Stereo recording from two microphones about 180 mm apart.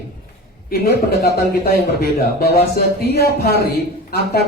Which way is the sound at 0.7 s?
60° left (ahead or behind).